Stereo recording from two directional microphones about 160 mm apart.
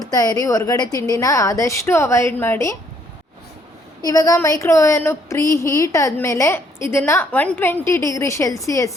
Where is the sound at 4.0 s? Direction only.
20° left (ahead or behind).